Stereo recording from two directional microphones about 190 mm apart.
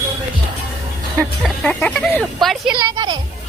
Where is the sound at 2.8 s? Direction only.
20° right (ahead or behind).